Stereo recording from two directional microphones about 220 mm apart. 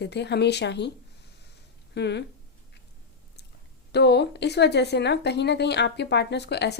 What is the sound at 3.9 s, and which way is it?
A woman's voice, 50° left (ahead or behind).